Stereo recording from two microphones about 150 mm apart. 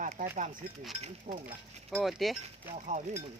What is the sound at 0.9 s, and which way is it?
Speech, 45° right (ahead or behind).